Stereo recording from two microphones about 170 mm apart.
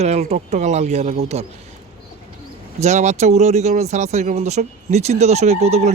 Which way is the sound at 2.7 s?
45° right (ahead or behind).